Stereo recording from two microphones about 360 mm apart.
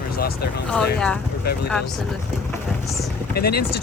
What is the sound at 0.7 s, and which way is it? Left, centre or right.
Speech, centre.